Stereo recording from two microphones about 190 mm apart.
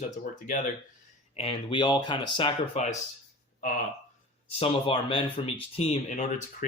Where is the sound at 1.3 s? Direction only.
30° left (ahead or behind).